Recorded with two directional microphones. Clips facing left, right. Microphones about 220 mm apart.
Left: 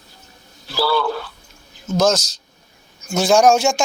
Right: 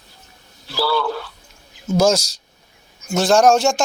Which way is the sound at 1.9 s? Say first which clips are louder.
Right 1 dB; 10° right (ahead or behind).